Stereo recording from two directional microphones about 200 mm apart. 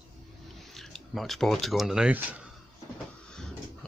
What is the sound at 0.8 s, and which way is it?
Speech, centre (ahead or behind).